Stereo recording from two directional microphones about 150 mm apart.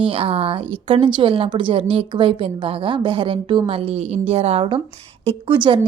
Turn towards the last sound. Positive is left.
turn(degrees=-35)  # may be behind; listen again after turning